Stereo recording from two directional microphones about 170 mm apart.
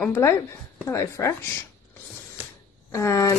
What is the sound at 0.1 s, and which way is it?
Speech, 15° left (ahead or behind).